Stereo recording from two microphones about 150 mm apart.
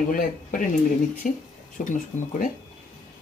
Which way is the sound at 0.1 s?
65° left (ahead or behind).